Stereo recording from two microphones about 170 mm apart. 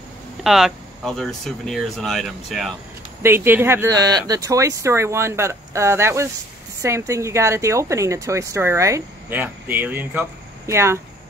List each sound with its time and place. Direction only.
0.4 s speech: centre (ahead or behind)
3.2 s speech: 15° right (ahead or behind)